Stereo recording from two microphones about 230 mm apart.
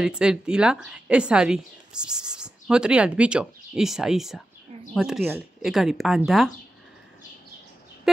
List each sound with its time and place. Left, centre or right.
0.0 s a woman's voice: centre